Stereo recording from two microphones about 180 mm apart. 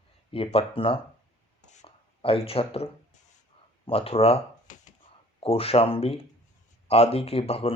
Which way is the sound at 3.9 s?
30° left (ahead or behind).